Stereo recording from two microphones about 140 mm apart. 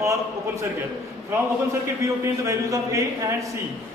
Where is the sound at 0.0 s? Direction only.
20° right (ahead or behind).